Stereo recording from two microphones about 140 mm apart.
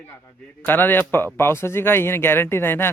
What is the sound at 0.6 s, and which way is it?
Speech, 15° left (ahead or behind).